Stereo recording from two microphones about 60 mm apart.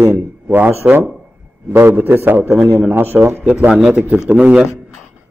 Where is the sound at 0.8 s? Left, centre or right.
Right.